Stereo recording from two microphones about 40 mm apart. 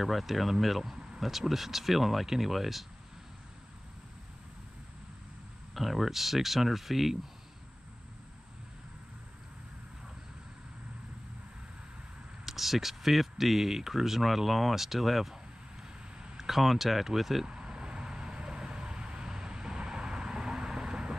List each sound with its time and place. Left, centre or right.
0.0 s speech: centre
5.8 s speech: centre
12.4 s speech: centre
16.4 s speech: centre
17.5 s vehicle: centre